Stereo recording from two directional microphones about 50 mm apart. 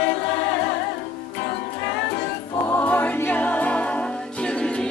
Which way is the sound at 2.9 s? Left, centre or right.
Left.